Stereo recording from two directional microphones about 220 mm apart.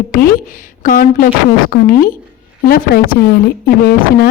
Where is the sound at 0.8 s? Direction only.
40° left (ahead or behind).